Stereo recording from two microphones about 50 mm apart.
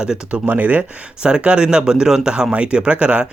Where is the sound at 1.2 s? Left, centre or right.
Right.